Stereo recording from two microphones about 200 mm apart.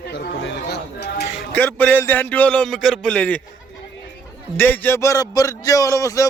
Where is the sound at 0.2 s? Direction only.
55° left (ahead or behind).